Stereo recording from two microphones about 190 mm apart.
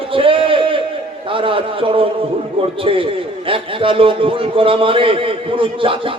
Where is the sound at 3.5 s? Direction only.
30° right (ahead or behind).